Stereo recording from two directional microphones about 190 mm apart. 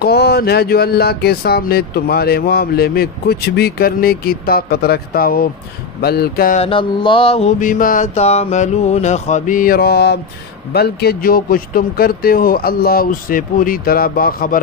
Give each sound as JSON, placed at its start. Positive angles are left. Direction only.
{"t": 0.0, "sound": "speech", "side_deg": 55}
{"t": 6.6, "sound": "mantra", "side_deg": 25}
{"t": 10.7, "sound": "speech", "side_deg": 55}